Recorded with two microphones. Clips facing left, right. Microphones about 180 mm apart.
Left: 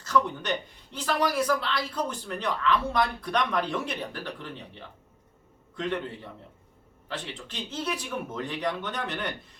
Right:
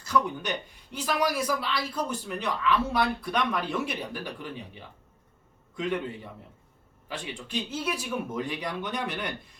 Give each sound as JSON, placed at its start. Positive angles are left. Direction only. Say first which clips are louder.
{"t": 0.0, "sound": "a man's voice", "louder": "left 1 dB", "side_deg": -10}
{"t": 7.1, "sound": "speech", "louder": "right 3 dB", "side_deg": -10}